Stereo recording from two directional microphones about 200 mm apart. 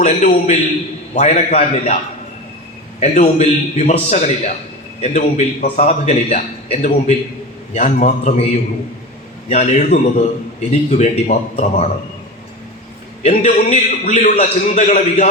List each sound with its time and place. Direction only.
0.0 s a man's voice: 35° left (ahead or behind)
3.0 s a man's voice: 35° left (ahead or behind)
9.5 s a man's voice: 35° left (ahead or behind)
13.2 s a man's voice: 35° left (ahead or behind)